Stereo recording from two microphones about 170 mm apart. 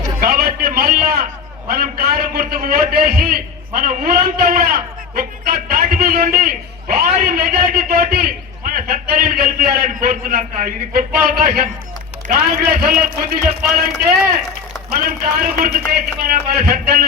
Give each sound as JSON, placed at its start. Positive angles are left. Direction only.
{"t": 0.0, "sound": "a sound", "side_deg": -60}
{"t": 1.6, "sound": "a man's voice", "side_deg": -60}
{"t": 14.8, "sound": "a man's voice", "side_deg": -60}